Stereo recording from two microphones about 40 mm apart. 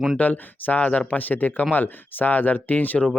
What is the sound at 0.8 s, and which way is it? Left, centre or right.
Speech, left.